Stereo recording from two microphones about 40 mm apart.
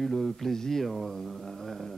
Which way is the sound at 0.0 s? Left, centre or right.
Centre.